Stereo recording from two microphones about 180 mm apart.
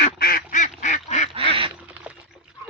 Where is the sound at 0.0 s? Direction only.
55° left (ahead or behind).